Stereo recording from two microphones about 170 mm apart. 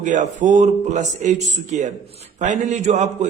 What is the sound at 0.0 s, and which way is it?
A man's voice, 45° right (ahead or behind).